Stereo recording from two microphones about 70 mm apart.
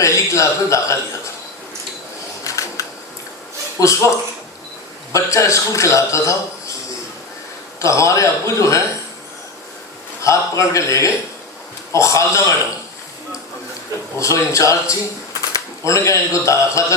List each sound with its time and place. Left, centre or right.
0.0 s a man's voice: left
2.4 s a sound: left
3.8 s a man's voice: left
5.1 s a man's voice: left
7.8 s a man's voice: left
10.2 s a man's voice: left
14.2 s a man's voice: left